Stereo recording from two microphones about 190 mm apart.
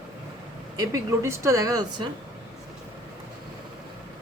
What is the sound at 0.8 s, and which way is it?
Speech, 15° right (ahead or behind).